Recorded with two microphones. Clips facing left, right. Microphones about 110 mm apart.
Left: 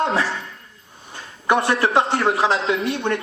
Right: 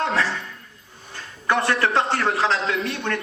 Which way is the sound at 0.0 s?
30° left (ahead or behind).